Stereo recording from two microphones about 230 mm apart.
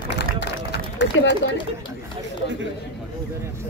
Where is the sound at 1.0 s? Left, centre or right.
Left.